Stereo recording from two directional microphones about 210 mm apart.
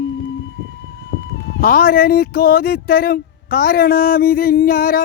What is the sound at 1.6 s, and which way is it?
Speech, 45° left (ahead or behind).